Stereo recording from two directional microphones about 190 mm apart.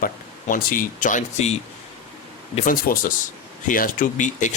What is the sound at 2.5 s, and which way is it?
Speech, 45° left (ahead or behind).